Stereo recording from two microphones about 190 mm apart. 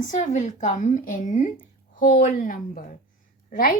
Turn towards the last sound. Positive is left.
turn(degrees=45)  # may be behind; listen again after turning